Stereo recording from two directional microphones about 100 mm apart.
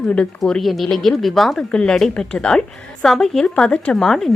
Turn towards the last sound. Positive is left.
turn(degrees=5)  # may be behind; listen again after turning